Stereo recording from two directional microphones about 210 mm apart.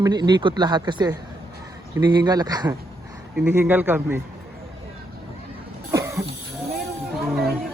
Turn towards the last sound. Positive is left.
turn(degrees=0)  # may be behind; listen again after turning